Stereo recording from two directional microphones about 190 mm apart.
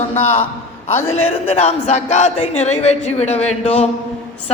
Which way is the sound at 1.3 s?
30° left (ahead or behind).